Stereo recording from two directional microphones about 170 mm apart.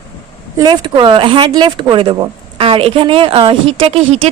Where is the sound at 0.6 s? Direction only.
25° right (ahead or behind).